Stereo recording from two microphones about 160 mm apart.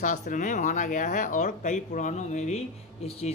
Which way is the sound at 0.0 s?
50° left (ahead or behind).